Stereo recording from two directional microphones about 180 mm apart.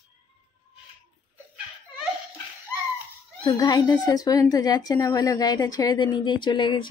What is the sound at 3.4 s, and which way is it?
A woman's voice, 20° left (ahead or behind).